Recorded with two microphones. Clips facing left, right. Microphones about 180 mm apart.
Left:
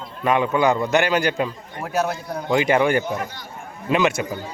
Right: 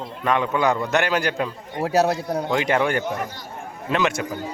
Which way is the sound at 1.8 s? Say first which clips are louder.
Right 4 dB; 35° right (ahead or behind).